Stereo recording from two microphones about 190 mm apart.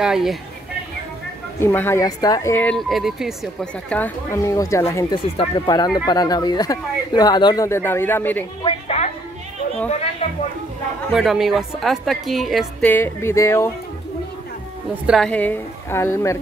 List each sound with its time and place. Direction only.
0.0 s a woman's voice: centre (ahead or behind)
1.6 s speech: 10° left (ahead or behind)
3.9 s speech: 10° left (ahead or behind)
8.6 s music: 35° left (ahead or behind)
10.2 s speech: 30° left (ahead or behind)
11.1 s a woman's voice: centre (ahead or behind)
12.9 s speech: 15° left (ahead or behind)
15.0 s speech: centre (ahead or behind)